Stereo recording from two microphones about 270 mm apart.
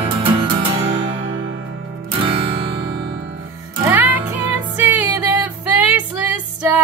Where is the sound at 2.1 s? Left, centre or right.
Centre.